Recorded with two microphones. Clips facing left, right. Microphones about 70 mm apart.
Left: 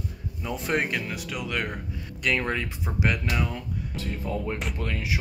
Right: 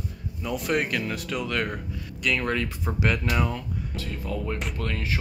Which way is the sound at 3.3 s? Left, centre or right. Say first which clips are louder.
Right 3 dB; centre.